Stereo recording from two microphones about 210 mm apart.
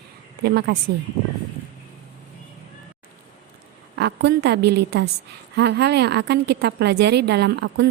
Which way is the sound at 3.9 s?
55° right (ahead or behind).